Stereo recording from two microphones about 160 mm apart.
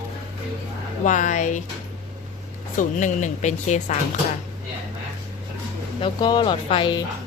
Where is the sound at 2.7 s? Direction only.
50° left (ahead or behind).